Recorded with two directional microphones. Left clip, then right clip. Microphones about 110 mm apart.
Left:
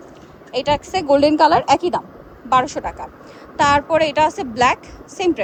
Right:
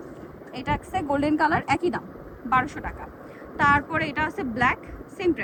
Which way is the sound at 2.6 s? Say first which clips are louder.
Left 9 dB; 50° left (ahead or behind).